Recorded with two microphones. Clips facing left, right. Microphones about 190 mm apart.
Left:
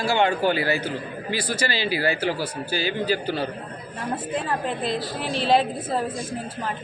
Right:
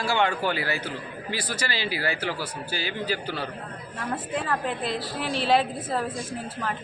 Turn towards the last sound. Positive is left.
turn(degrees=-5)  # may be behind; listen again after turning